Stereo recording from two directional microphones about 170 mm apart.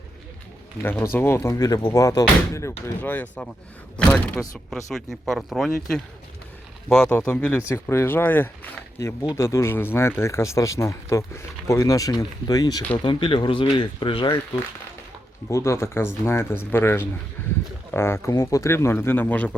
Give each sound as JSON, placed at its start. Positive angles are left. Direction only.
{"t": 0.8, "sound": "speech", "side_deg": 10}
{"t": 15.4, "sound": "speech", "side_deg": 15}